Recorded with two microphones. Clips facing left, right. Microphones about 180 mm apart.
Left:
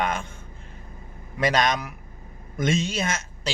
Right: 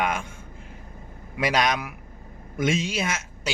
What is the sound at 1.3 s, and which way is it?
Speech, 10° right (ahead or behind).